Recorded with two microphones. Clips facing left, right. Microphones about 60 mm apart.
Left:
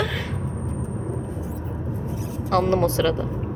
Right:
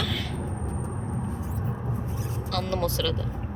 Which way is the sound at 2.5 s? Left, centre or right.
Left.